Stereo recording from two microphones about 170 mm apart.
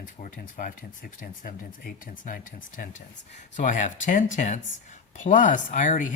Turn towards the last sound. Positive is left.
turn(degrees=50)  # may be behind; listen again after turning